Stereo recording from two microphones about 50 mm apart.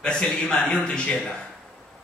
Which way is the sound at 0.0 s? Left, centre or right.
Centre.